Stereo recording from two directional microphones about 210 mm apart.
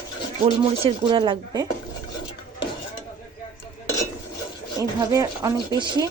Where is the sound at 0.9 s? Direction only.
20° right (ahead or behind).